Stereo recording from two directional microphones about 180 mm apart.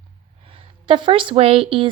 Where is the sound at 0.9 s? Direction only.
30° right (ahead or behind).